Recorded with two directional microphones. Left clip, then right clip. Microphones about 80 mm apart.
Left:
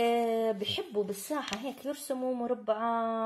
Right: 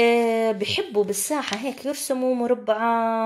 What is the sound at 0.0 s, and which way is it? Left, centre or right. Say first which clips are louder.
Speech: right 9 dB; right.